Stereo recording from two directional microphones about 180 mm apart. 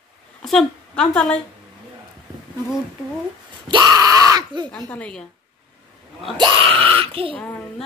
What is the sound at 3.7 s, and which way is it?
Screaming, 20° right (ahead or behind).